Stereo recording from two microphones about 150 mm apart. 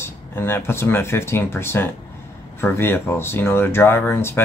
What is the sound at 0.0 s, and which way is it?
Speech, 15° left (ahead or behind).